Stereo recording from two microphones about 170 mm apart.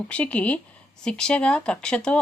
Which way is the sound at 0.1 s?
10° left (ahead or behind).